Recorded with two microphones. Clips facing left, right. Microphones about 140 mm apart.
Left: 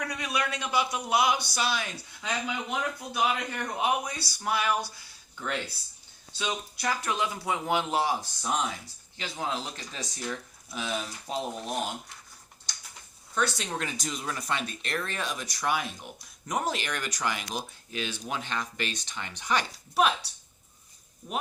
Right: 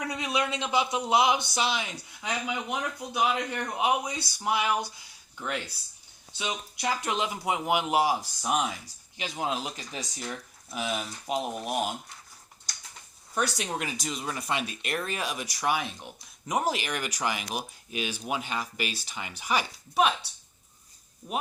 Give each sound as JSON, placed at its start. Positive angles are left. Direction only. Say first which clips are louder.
{"t": 0.0, "sound": "speech", "louder": "right 2 dB", "side_deg": -20}
{"t": 13.3, "sound": "speech", "louder": "even", "side_deg": -15}
{"t": 13.8, "sound": "speech", "louder": "right 1 dB", "side_deg": -5}